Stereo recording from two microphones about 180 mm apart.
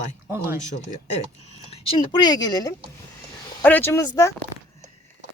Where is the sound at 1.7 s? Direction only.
30° left (ahead or behind).